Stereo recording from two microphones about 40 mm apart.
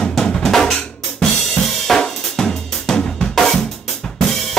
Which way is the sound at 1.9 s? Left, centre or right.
Centre.